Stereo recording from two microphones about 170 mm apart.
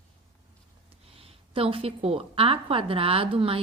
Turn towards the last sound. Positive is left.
turn(degrees=-30)  # may be behind; listen again after turning